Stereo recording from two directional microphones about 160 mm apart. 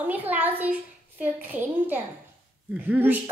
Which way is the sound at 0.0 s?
10° right (ahead or behind).